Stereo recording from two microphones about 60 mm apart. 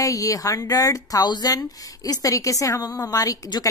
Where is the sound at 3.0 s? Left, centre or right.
Left.